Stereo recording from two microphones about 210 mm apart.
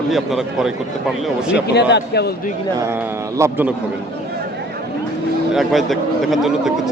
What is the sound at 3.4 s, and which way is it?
Speech, 10° right (ahead or behind).